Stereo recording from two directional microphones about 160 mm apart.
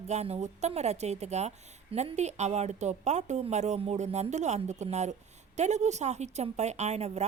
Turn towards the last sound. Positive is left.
turn(degrees=-45)  # may be behind; listen again after turning